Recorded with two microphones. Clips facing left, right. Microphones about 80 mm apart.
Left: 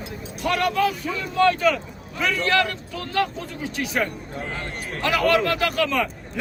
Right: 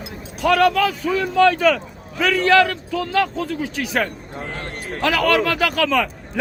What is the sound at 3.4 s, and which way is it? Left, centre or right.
Speech, right.